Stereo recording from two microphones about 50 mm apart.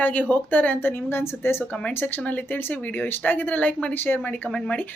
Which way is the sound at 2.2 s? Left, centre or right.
Left.